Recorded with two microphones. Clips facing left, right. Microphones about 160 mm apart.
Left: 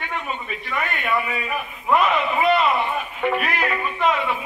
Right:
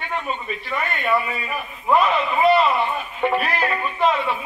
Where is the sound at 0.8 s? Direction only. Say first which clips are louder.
Right 2 dB; 35° right (ahead or behind).